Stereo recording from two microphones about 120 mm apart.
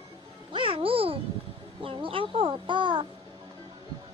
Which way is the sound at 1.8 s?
50° right (ahead or behind).